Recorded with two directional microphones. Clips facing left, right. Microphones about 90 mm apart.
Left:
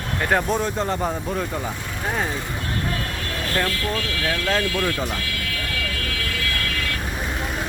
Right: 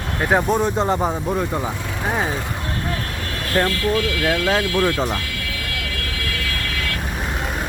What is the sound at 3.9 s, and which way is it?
Speech, 20° right (ahead or behind).